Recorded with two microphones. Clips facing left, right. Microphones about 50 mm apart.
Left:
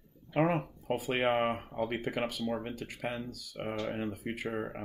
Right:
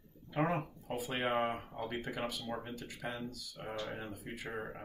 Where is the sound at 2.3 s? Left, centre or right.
Left.